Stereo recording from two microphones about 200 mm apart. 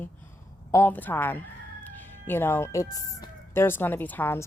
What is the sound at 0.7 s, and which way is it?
Speech, 10° left (ahead or behind).